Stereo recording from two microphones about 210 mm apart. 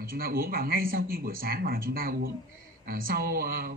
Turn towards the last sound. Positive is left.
turn(degrees=-45)  # may be behind; listen again after turning